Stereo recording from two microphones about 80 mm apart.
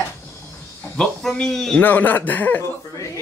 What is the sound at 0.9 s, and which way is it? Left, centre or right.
Speech, centre.